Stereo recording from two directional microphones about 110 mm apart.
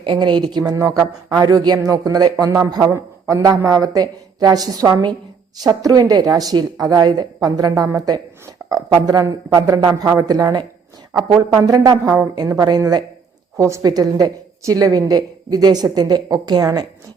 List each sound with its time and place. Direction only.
0.0 s a woman's voice: 45° right (ahead or behind)
13.6 s a woman's voice: 25° right (ahead or behind)